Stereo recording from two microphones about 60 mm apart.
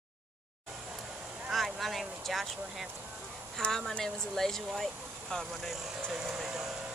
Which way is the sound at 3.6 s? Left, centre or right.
Centre.